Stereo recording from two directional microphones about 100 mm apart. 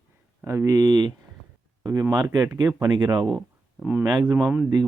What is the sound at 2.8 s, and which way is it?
Speech, 50° right (ahead or behind).